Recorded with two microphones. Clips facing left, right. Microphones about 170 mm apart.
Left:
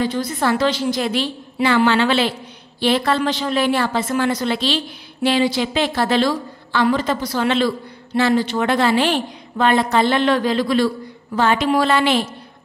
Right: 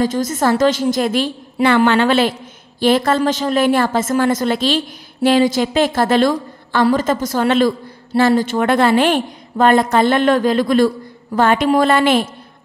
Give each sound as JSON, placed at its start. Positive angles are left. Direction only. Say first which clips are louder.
{"t": 0.0, "sound": "a woman's voice", "louder": "right 4 dB", "side_deg": -45}